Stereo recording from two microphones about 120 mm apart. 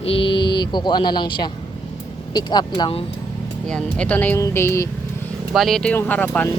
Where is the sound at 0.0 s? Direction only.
50° left (ahead or behind).